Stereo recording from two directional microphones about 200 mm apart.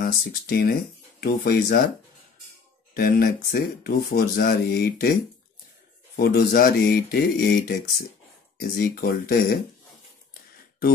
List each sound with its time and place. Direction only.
0.0 s speech: 50° left (ahead or behind)
2.9 s speech: 45° left (ahead or behind)
6.1 s speech: 50° left (ahead or behind)